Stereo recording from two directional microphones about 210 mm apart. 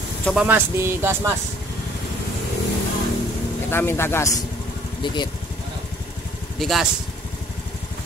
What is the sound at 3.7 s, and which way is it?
Speech, 10° left (ahead or behind).